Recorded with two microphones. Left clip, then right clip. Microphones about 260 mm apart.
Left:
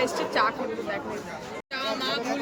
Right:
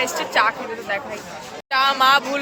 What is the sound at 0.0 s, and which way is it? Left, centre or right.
Speech, centre.